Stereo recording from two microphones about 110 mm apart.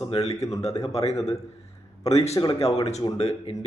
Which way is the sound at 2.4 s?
65° left (ahead or behind).